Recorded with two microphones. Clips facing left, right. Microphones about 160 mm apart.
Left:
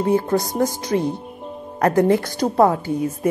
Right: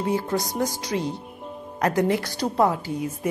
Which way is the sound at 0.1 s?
50° left (ahead or behind).